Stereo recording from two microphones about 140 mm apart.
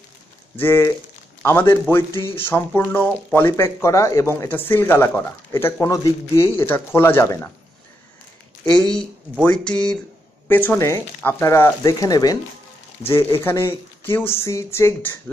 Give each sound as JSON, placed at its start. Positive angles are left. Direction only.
{"t": 0.6, "sound": "speech", "side_deg": 15}
{"t": 9.4, "sound": "speech", "side_deg": 10}